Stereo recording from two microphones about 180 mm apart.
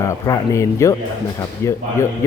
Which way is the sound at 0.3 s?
15° left (ahead or behind).